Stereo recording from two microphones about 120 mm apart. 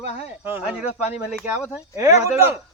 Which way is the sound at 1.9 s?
25° right (ahead or behind).